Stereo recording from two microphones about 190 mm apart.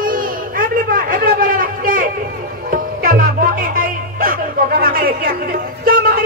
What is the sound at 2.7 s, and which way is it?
Music, 50° right (ahead or behind).